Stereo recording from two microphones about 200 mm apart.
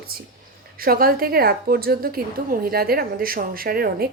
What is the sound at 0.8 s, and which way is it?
Speech, 45° right (ahead or behind).